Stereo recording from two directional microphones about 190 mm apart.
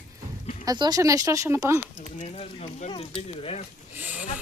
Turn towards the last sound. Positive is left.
turn(degrees=-10)  # may be behind; listen again after turning